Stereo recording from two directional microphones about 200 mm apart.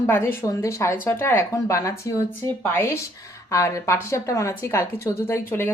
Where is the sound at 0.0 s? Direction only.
10° left (ahead or behind).